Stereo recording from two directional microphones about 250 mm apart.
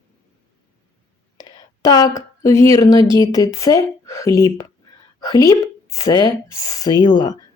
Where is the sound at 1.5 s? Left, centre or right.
Centre.